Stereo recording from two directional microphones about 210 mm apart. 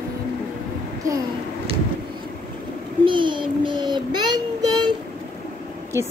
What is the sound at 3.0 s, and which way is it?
Child singing, 25° right (ahead or behind).